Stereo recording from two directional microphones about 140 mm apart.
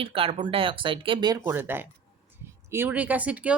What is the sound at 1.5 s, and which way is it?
Speech, 15° right (ahead or behind).